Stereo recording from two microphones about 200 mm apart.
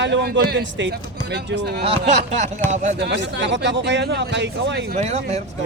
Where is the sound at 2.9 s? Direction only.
60° right (ahead or behind).